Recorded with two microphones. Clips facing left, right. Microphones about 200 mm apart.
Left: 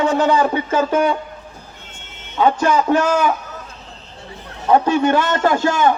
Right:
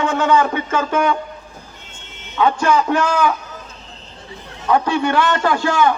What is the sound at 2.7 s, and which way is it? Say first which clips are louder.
Speech: left 1 dB; 40° left (ahead or behind).